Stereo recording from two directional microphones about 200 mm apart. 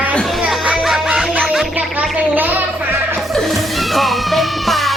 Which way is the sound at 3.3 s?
Centre (ahead or behind).